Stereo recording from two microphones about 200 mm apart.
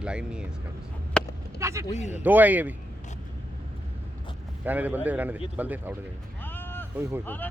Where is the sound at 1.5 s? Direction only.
15° right (ahead or behind).